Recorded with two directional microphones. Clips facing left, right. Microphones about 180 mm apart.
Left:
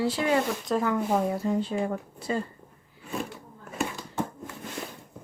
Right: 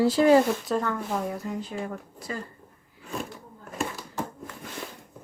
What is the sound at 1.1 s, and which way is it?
Speech, 30° left (ahead or behind).